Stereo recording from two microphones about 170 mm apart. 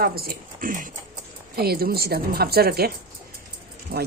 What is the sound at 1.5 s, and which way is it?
A woman's voice, 65° right (ahead or behind).